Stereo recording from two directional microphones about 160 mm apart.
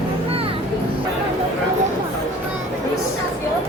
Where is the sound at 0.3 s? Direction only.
35° right (ahead or behind).